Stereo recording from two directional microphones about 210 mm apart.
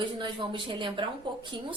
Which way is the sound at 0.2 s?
25° right (ahead or behind).